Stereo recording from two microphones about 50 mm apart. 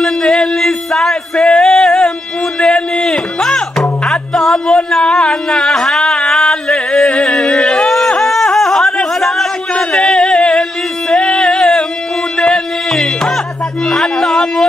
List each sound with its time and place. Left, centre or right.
0.0 s music: centre
8.2 s a sound: centre
9.8 s singing: centre
12.4 s music: centre